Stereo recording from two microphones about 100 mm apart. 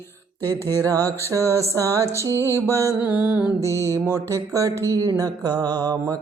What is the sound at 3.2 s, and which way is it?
Music, 10° right (ahead or behind).